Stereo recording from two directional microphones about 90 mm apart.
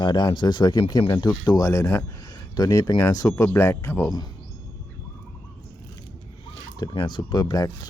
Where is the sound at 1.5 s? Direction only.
40° left (ahead or behind).